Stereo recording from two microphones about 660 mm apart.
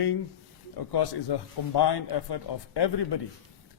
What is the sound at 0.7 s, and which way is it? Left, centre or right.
Speech, left.